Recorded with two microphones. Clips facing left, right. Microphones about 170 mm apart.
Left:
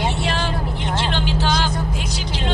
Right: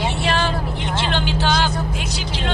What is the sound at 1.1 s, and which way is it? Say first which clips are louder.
Speech: right 3 dB; 65° right (ahead or behind).